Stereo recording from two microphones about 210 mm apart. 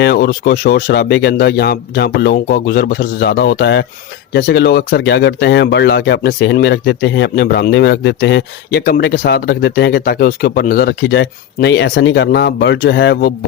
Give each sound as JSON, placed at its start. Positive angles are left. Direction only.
{"t": 0.0, "sound": "speech", "side_deg": 50}